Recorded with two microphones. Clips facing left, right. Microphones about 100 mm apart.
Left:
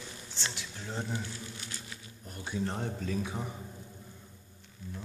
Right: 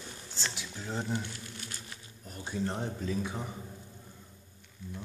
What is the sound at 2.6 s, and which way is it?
Speech, centre (ahead or behind).